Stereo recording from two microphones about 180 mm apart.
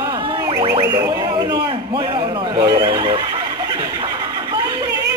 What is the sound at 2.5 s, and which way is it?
Neigh, 25° right (ahead or behind).